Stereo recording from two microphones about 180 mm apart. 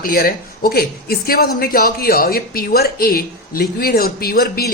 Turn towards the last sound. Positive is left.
turn(degrees=60)  # may be behind; listen again after turning